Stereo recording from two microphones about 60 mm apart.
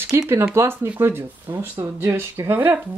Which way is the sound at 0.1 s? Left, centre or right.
Right.